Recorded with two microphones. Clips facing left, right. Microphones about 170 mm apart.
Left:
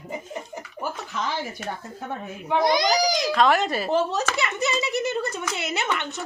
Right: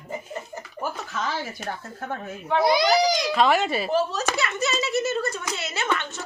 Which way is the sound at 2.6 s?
5° right (ahead or behind).